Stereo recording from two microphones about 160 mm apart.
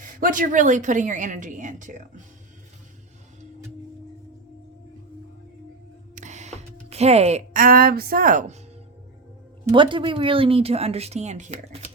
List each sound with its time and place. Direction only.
0.0 s a woman's voice: 55° right (ahead or behind)
6.1 s a sound: 45° right (ahead or behind)
7.5 s a woman's voice: 60° right (ahead or behind)
9.7 s speech: 30° right (ahead or behind)